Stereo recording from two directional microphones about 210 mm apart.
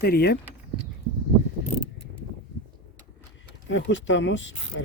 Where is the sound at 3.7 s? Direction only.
60° left (ahead or behind).